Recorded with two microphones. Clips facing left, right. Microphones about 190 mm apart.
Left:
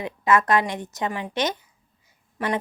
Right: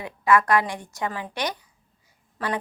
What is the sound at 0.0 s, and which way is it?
A woman's voice, 20° left (ahead or behind).